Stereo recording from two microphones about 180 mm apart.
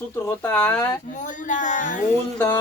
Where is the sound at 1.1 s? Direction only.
45° left (ahead or behind).